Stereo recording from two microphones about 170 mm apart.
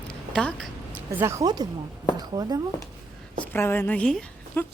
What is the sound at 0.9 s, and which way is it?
Speech, 10° right (ahead or behind).